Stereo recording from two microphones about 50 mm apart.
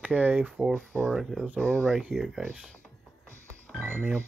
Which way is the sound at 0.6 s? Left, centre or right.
Right.